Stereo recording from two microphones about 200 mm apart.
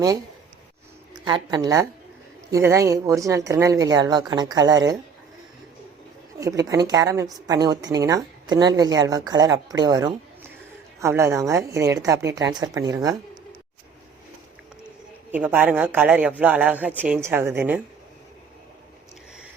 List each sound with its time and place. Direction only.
1.1 s a woman's voice: 20° right (ahead or behind)
6.4 s speech: 15° right (ahead or behind)
15.3 s speech: 10° right (ahead or behind)